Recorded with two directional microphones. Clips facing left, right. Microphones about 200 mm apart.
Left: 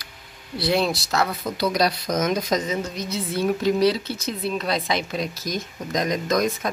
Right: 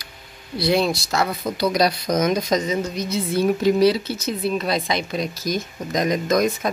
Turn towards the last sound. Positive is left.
turn(degrees=0)  # may be behind; listen again after turning